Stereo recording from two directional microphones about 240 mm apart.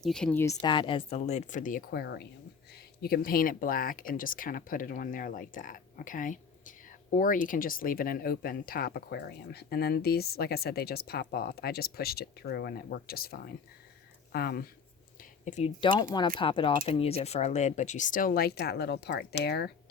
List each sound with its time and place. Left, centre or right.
0.0 s speech: centre; by 19.7 s left